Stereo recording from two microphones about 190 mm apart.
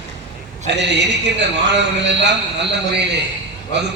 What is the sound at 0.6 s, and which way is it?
A man's voice, 65° right (ahead or behind).